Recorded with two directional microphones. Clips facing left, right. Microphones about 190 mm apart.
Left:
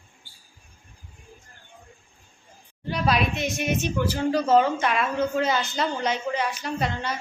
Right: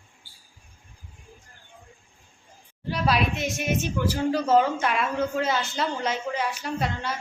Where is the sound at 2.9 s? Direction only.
5° right (ahead or behind).